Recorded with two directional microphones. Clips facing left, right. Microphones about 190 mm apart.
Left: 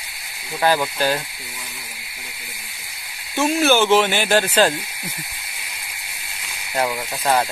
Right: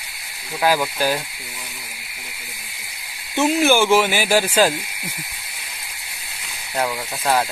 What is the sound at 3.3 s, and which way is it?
Speech, 15° right (ahead or behind).